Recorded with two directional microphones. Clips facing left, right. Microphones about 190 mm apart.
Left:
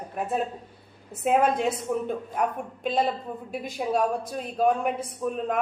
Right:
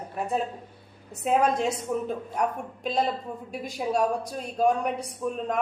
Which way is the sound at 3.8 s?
Centre (ahead or behind).